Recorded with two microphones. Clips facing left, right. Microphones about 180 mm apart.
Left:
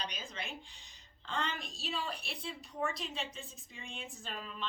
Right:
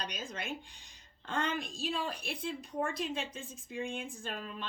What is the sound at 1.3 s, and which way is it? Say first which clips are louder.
A woman's voice: right 4 dB; 50° right (ahead or behind).